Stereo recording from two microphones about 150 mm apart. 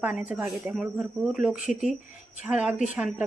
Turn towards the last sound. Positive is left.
turn(degrees=-5)  # may be behind; listen again after turning